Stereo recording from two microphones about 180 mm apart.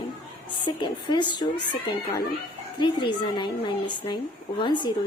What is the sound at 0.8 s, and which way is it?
Speech, 25° left (ahead or behind).